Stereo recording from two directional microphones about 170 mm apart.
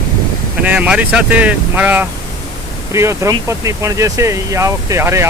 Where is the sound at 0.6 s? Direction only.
10° right (ahead or behind).